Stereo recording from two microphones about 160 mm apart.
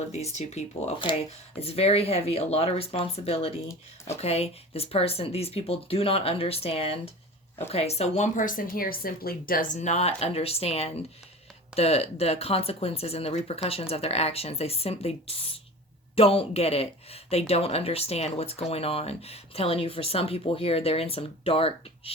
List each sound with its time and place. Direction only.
0.1 s speech: 45° left (ahead or behind); by 9.6 s 65° left (ahead or behind)
9.7 s speech: 45° left (ahead or behind)